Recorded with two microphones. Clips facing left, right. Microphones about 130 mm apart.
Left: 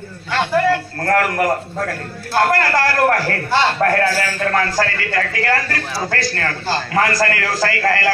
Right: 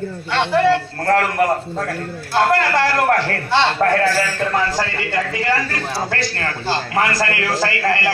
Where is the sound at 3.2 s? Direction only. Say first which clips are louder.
Even; 25° right (ahead or behind).